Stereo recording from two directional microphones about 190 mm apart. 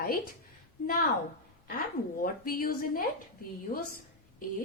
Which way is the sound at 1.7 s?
50° left (ahead or behind).